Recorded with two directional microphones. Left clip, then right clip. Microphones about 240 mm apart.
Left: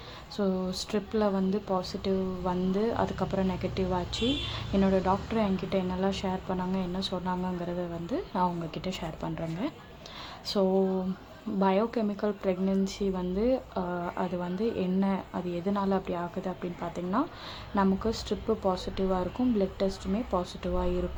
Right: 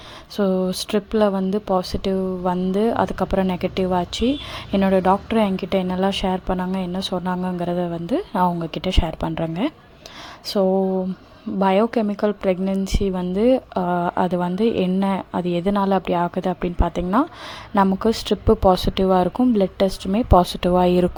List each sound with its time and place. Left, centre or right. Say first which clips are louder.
0.3 s speech: right 10 dB; right